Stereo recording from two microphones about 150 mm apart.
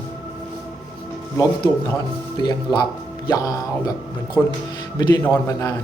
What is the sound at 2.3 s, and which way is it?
Speech, 30° left (ahead or behind).